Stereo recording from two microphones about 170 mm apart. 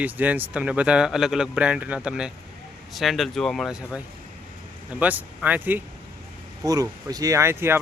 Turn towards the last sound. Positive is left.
turn(degrees=-15)  # may be behind; listen again after turning